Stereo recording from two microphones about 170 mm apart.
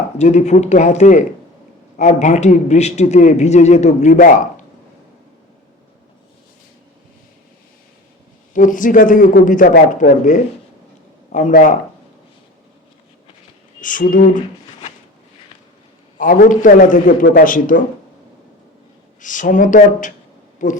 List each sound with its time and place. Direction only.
0.2 s a man's voice: 40° left (ahead or behind)
8.5 s a man's voice: 50° left (ahead or behind)
13.8 s speech: 50° left (ahead or behind)
16.1 s a man's voice: 50° left (ahead or behind)
19.2 s speech: 50° left (ahead or behind)